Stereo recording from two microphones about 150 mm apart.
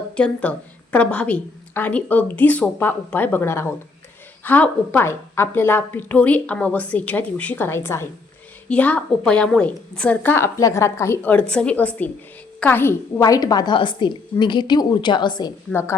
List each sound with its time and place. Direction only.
0.2 s a woman's voice: 10° left (ahead or behind); by 15.5 s 30° left (ahead or behind)
15.7 s a woman's voice: 15° left (ahead or behind)